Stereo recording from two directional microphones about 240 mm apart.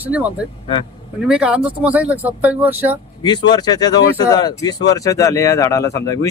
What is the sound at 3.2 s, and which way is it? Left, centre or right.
Speech, centre.